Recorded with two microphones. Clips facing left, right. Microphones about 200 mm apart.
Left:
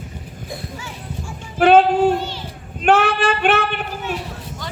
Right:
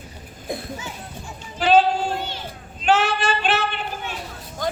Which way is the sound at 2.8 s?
55° left (ahead or behind).